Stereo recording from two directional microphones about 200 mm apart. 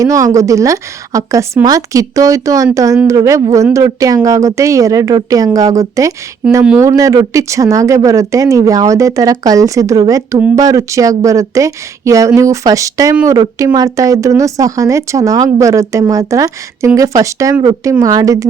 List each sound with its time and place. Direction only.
0.0 s speech: 15° right (ahead or behind)